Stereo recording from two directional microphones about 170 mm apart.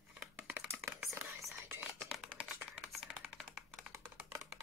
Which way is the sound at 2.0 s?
Centre (ahead or behind).